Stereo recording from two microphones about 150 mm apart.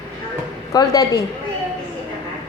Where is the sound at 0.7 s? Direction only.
25° left (ahead or behind).